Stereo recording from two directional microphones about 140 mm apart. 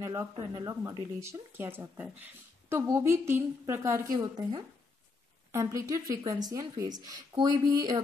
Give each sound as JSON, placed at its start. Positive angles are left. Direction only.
{"t": 0.0, "sound": "speech", "side_deg": -25}
{"t": 5.5, "sound": "speech", "side_deg": -20}